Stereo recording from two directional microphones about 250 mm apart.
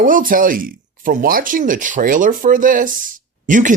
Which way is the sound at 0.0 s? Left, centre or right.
Right.